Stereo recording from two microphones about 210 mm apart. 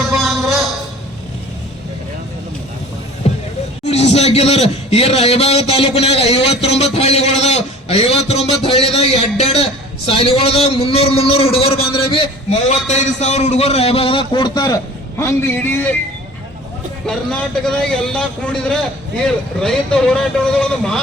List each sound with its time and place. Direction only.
0.1 s music: centre (ahead or behind)
3.2 s music: 30° left (ahead or behind)
3.8 s a man's voice: 30° left (ahead or behind); by 16.0 s 10° left (ahead or behind)
17.7 s speech: 5° left (ahead or behind)